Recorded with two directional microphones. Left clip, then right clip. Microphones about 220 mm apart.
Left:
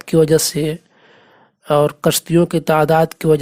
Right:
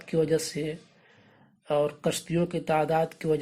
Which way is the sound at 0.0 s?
45° left (ahead or behind).